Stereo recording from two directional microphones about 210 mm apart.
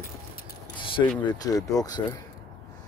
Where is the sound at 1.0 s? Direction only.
15° left (ahead or behind).